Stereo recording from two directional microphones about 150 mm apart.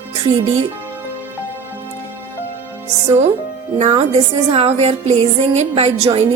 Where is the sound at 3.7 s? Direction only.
50° right (ahead or behind).